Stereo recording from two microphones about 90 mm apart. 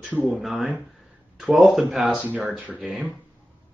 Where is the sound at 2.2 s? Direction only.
15° right (ahead or behind).